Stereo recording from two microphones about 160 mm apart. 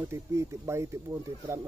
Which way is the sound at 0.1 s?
20° right (ahead or behind).